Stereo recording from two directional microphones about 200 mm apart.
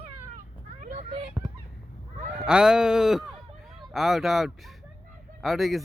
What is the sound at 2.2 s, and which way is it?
Goose, 40° right (ahead or behind).